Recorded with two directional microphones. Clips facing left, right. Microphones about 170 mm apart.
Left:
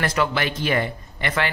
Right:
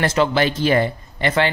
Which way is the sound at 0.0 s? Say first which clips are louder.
Right 5 dB; 25° right (ahead or behind).